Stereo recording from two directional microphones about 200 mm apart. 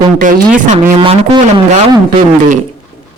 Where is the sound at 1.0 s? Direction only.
30° right (ahead or behind).